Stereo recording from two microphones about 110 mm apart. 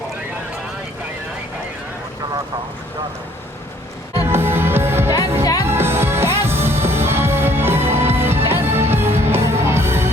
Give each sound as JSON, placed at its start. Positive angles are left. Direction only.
{"t": 4.2, "sound": "music", "side_deg": -20}